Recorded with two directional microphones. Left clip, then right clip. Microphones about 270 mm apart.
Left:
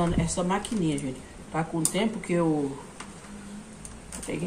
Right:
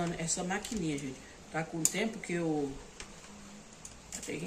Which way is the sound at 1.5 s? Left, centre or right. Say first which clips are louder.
Left 6 dB; centre.